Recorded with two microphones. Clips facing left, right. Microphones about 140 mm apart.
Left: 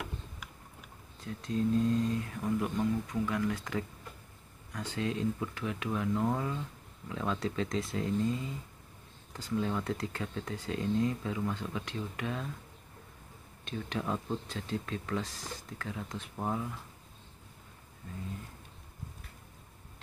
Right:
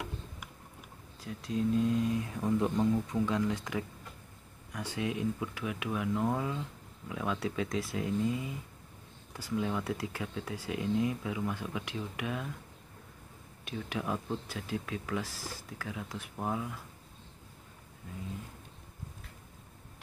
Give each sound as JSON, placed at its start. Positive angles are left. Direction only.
{"t": 1.2, "sound": "speech", "side_deg": -5}
{"t": 9.6, "sound": "speech", "side_deg": -10}
{"t": 13.7, "sound": "speech", "side_deg": -5}